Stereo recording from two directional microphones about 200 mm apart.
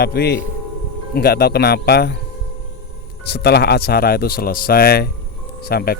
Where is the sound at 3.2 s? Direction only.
55° left (ahead or behind).